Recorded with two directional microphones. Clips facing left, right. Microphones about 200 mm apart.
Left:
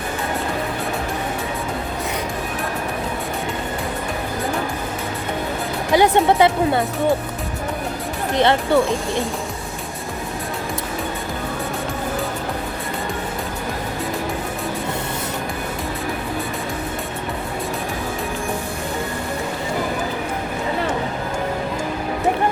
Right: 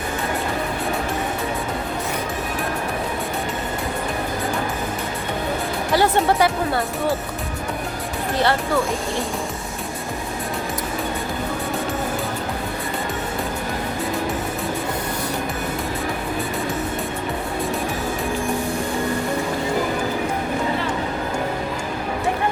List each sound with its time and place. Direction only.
5.9 s speech: 20° left (ahead or behind)
8.4 s speech: 20° left (ahead or behind)